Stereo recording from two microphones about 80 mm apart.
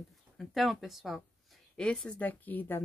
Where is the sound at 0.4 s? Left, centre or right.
Centre.